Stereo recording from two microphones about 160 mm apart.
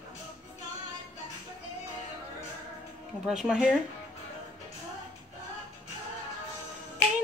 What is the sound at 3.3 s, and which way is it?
Speech, 5° right (ahead or behind).